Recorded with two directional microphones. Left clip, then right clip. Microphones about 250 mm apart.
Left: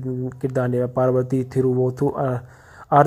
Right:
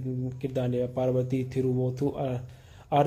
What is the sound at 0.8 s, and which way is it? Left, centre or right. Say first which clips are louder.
Speech: left 8 dB; centre.